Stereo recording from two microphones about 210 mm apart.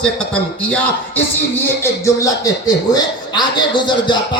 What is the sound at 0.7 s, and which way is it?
A man's voice, 5° left (ahead or behind).